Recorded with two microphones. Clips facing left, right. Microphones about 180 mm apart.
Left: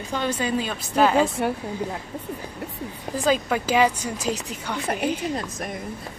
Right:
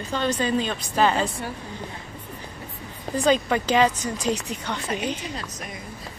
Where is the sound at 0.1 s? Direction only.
10° left (ahead or behind).